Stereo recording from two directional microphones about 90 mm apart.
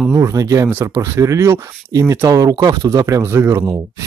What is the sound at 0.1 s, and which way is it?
Speech, 40° right (ahead or behind).